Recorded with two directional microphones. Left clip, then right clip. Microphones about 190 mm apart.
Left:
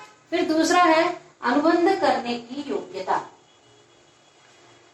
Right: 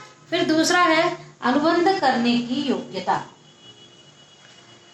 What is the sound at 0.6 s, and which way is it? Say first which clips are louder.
Speech: left 1 dB; 25° right (ahead or behind).